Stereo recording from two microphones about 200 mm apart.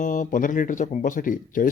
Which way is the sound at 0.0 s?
40° left (ahead or behind).